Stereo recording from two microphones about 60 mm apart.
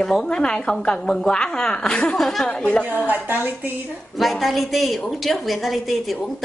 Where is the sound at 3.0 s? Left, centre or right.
Right.